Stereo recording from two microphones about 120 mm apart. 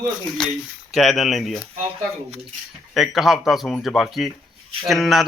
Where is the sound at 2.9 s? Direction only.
Centre (ahead or behind).